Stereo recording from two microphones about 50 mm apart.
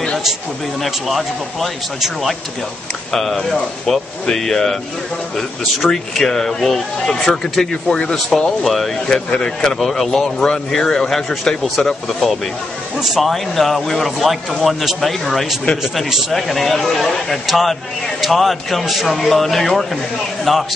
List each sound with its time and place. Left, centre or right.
0.8 s a man's voice: centre
3.1 s speech: centre
8.4 s a man's voice: centre